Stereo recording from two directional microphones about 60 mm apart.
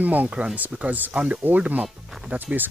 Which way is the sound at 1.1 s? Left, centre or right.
Centre.